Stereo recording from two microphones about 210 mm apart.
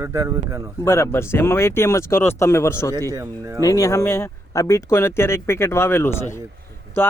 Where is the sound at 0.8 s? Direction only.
15° left (ahead or behind).